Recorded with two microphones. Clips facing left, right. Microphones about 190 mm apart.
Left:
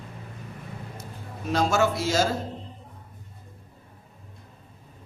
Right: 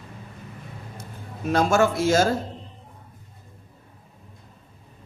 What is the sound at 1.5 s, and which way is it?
Speech, 50° right (ahead or behind).